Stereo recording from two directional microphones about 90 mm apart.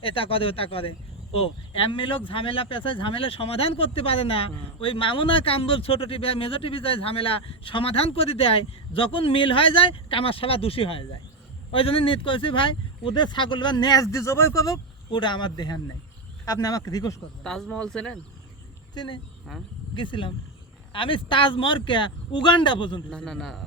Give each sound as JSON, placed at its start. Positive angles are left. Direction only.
{"t": 0.0, "sound": "speech", "side_deg": 85}
{"t": 15.1, "sound": "speech", "side_deg": 60}
{"t": 16.5, "sound": "speech", "side_deg": 40}
{"t": 17.4, "sound": "speech", "side_deg": 5}
{"t": 18.9, "sound": "speech", "side_deg": 55}
{"t": 20.0, "sound": "speech", "side_deg": 65}
{"t": 20.9, "sound": "speech", "side_deg": 75}
{"t": 23.0, "sound": "a man's voice", "side_deg": 5}